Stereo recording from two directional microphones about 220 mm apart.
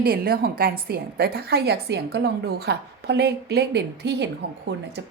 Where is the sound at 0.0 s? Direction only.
45° right (ahead or behind).